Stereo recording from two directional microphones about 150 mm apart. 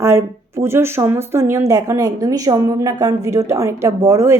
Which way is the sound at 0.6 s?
15° right (ahead or behind).